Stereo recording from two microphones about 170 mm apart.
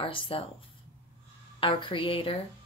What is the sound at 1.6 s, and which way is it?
Speech, 30° left (ahead or behind).